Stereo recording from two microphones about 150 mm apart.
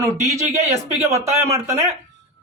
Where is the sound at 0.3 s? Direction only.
20° right (ahead or behind).